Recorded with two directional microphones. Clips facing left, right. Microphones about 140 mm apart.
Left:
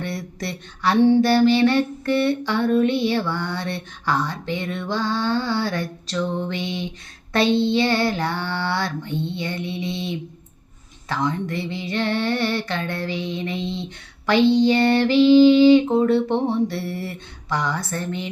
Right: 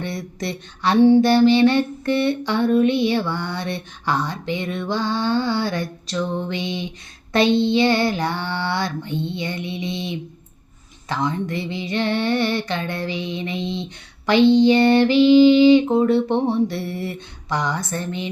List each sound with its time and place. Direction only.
0.0 s speech: 20° right (ahead or behind)
1.1 s a sound: 20° right (ahead or behind)
11.1 s female singing: 20° right (ahead or behind)